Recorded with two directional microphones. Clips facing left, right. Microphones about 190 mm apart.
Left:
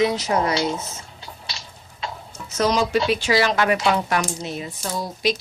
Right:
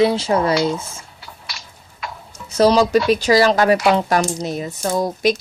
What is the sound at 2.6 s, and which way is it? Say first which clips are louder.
Speech: right 6 dB; 35° right (ahead or behind).